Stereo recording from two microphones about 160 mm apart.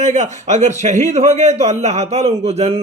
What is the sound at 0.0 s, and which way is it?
A man's voice, 50° right (ahead or behind).